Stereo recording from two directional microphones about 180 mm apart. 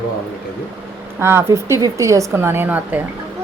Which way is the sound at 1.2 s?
15° right (ahead or behind).